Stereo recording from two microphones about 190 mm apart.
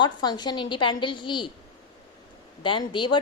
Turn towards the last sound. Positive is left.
turn(degrees=25)  # may be behind; listen again after turning